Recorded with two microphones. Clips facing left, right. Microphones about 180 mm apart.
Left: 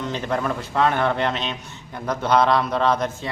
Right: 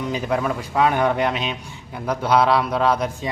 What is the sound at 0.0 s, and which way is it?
A man's voice, 10° right (ahead or behind).